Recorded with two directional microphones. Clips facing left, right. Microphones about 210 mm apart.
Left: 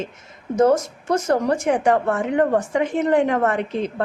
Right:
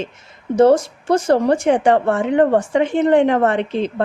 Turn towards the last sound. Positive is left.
turn(degrees=-30)  # may be behind; listen again after turning